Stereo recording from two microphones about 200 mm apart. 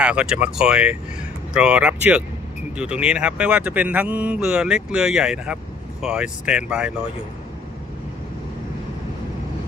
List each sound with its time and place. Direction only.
0.0 s speech: 5° right (ahead or behind)